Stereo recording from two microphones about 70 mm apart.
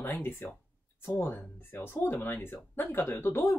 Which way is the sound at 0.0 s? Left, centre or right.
Left.